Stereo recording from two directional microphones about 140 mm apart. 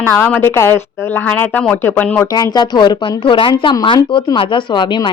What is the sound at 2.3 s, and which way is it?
Speech, 30° left (ahead or behind).